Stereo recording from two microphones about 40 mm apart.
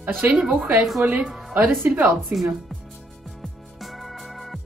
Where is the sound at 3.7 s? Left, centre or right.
Centre.